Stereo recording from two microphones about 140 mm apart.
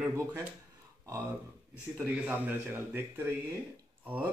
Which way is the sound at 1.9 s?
10° right (ahead or behind).